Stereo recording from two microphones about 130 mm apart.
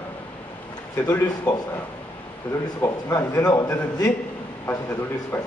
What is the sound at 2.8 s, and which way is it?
A man's voice, 25° left (ahead or behind).